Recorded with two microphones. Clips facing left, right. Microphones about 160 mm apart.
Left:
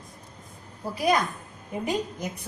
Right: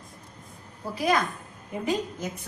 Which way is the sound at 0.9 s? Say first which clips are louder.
Left 1 dB; 15° left (ahead or behind).